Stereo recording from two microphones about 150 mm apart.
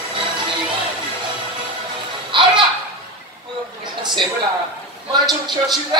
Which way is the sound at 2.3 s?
35° right (ahead or behind).